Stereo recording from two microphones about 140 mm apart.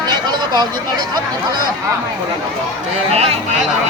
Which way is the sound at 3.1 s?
50° right (ahead or behind).